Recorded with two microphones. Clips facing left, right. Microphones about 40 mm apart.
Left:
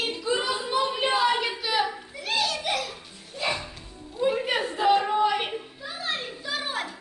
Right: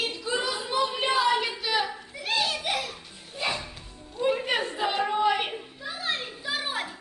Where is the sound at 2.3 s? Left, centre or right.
Right.